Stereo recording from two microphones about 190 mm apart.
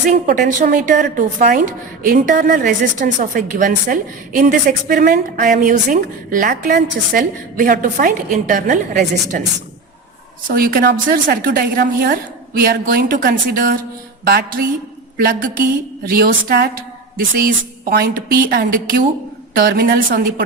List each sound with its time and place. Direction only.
0.1 s a woman's voice: 50° right (ahead or behind)
10.5 s a woman's voice: 50° right (ahead or behind)
14.3 s music: 55° right (ahead or behind)
15.2 s a woman's voice: 45° right (ahead or behind)